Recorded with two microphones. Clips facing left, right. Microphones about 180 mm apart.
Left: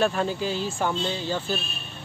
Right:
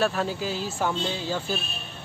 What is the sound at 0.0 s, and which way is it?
Speech, centre (ahead or behind).